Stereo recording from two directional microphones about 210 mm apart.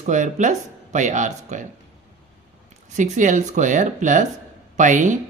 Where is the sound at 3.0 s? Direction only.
35° right (ahead or behind).